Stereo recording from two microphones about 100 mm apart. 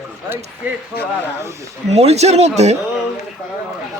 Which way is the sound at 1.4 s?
30° right (ahead or behind).